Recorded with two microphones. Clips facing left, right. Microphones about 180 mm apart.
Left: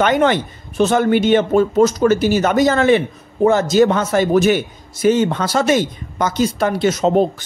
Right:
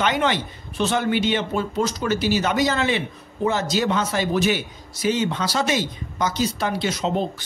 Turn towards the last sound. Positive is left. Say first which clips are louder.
# left 8 dB
turn(degrees=50)  # may be behind; listen again after turning